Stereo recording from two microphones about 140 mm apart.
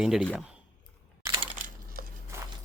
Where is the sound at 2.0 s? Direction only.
90° right.